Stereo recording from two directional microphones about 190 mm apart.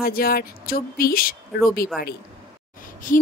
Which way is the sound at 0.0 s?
50° left (ahead or behind).